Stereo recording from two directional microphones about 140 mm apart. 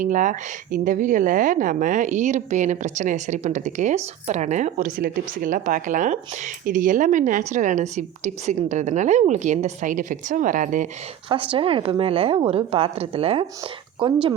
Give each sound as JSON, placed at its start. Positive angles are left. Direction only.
{"t": 0.0, "sound": "speech", "side_deg": -65}
{"t": 11.3, "sound": "a woman's voice", "side_deg": -40}